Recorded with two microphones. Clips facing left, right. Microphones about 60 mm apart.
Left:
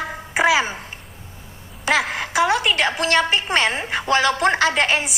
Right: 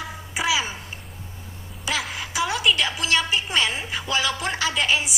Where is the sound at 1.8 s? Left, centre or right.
Left.